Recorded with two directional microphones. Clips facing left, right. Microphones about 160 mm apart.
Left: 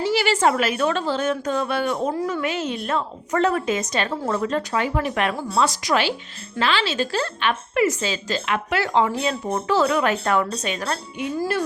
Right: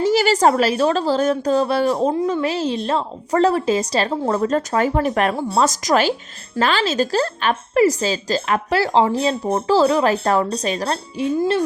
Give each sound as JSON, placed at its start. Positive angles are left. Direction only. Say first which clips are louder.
{"t": 0.0, "sound": "a woman's voice", "louder": "right 4 dB", "side_deg": -40}